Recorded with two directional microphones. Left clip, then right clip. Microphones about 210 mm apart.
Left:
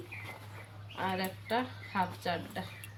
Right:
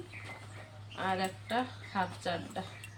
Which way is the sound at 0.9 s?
20° left (ahead or behind).